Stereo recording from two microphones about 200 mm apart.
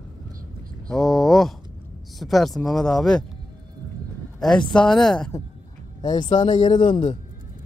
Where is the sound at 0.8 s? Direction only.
Centre (ahead or behind).